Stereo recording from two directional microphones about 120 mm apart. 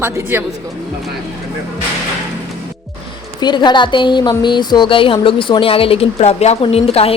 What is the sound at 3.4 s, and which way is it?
Speech, 40° left (ahead or behind).